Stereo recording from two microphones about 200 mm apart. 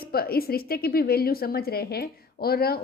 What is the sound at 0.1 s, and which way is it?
A woman's voice, 50° left (ahead or behind).